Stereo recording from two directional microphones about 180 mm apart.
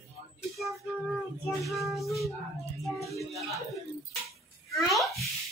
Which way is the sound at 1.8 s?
Centre (ahead or behind).